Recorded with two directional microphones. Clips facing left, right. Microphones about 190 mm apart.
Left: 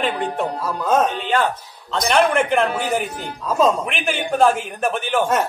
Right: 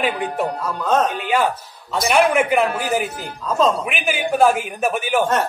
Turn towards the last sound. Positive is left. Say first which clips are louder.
# right 1 dB
turn(degrees=-10)  # may be behind; listen again after turning